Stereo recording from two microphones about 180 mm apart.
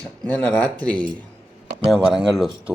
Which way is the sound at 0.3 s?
5° left (ahead or behind).